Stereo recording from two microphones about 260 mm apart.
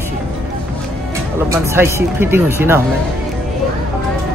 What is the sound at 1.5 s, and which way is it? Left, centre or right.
A man's voice, centre.